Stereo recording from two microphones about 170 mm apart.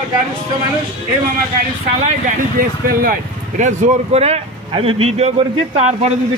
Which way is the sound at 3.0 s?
50° right (ahead or behind).